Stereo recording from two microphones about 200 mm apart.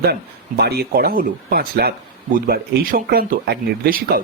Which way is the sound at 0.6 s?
50° right (ahead or behind).